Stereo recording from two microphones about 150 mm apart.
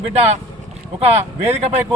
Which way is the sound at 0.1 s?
45° right (ahead or behind).